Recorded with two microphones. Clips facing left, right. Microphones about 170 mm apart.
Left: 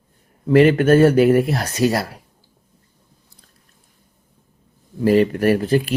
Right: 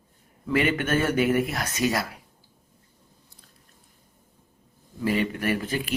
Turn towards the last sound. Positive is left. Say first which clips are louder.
# left 10 dB
turn(degrees=35)  # may be behind; listen again after turning